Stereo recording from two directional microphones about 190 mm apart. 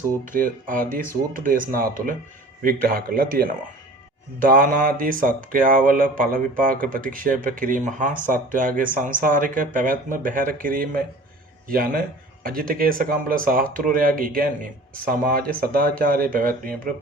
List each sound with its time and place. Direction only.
0.3 s speech: 45° right (ahead or behind)
2.6 s speech: 50° right (ahead or behind)